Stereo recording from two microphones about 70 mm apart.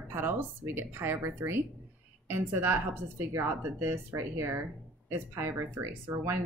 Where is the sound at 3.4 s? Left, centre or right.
Right.